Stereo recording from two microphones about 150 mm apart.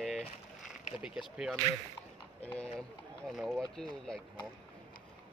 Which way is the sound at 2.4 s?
10° left (ahead or behind).